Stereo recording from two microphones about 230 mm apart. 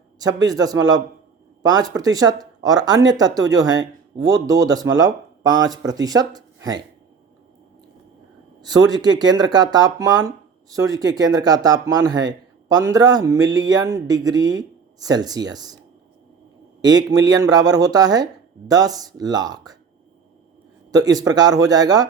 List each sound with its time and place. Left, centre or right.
0.2 s speech: centre
8.6 s speech: centre
16.8 s speech: centre
20.9 s speech: centre